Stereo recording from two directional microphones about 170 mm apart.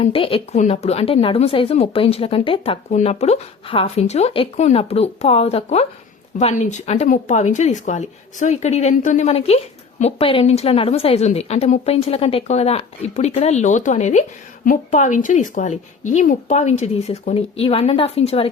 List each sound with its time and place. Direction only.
0.0 s a woman's voice: 35° left (ahead or behind)